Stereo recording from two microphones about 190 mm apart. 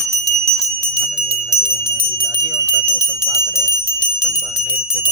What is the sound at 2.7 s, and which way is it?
Bicycle bell, 10° right (ahead or behind).